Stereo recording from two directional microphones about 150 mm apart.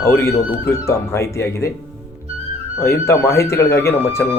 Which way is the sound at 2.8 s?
20° left (ahead or behind).